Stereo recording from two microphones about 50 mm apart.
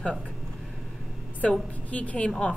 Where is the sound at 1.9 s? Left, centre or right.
Left.